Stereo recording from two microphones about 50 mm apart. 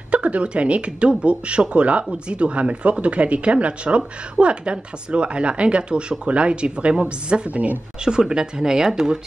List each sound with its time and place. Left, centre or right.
0.1 s speech: right
8.0 s speech: centre